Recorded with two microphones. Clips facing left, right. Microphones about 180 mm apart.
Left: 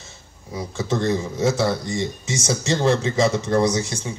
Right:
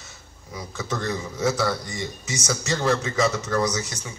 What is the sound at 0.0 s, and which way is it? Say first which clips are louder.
A man's voice: left 3 dB; 25° left (ahead or behind).